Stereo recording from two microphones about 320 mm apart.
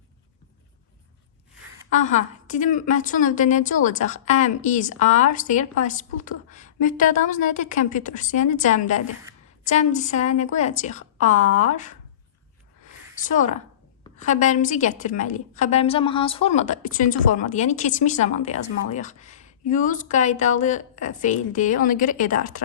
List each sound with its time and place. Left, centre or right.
1.9 s a woman's voice: left
12.8 s a sound: left
14.2 s a woman's voice: left